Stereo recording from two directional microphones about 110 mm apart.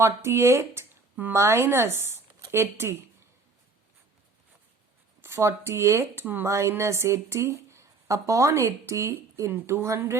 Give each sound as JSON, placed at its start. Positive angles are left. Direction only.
{"t": 0.0, "sound": "speech", "side_deg": -25}
{"t": 5.2, "sound": "speech", "side_deg": -25}